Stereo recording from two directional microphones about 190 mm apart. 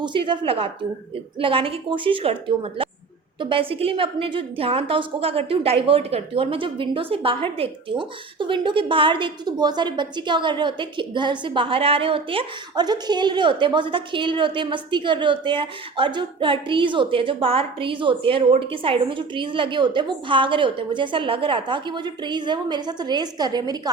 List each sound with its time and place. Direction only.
0.0 s a woman's voice: 25° right (ahead or behind)